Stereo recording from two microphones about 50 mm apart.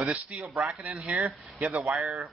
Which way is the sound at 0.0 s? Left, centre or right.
Right.